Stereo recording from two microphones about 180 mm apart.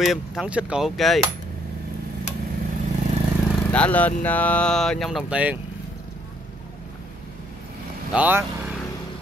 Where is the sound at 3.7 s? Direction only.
10° left (ahead or behind).